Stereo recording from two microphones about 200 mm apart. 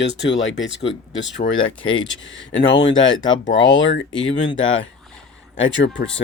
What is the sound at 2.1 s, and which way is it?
Speech, 70° left (ahead or behind).